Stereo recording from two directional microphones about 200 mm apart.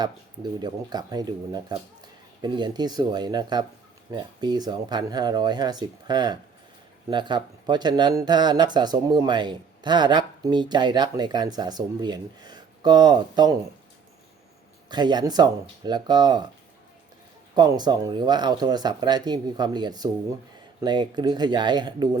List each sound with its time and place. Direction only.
0.6 s speech: 20° right (ahead or behind)
14.8 s speech: 20° right (ahead or behind)
17.5 s speech: 20° right (ahead or behind)